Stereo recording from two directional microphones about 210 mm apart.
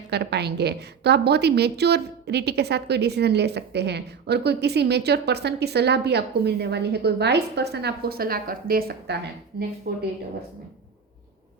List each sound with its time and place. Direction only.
0.1 s a woman's voice: 50° right (ahead or behind)